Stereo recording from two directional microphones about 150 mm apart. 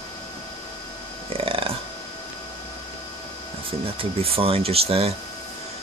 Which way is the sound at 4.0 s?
40° right (ahead or behind).